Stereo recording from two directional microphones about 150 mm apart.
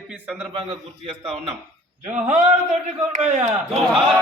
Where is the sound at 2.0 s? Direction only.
50° right (ahead or behind).